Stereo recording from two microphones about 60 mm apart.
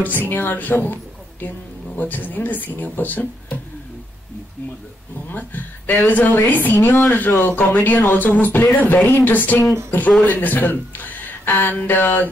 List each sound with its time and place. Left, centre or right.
0.3 s a woman's voice: left
2.0 s speech: left
5.2 s a woman's voice: left